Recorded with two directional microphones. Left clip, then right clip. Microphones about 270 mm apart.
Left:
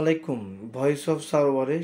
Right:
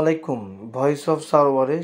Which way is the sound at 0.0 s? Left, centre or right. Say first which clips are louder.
Right 4 dB; centre.